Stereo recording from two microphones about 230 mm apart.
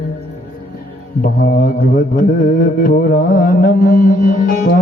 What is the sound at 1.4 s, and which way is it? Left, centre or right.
Music, left.